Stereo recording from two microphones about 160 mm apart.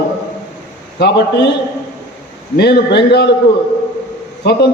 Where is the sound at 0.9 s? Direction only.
90° left.